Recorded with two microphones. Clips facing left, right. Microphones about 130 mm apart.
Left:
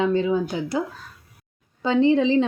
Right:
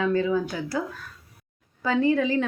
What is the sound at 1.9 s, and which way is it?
Speech, 25° left (ahead or behind).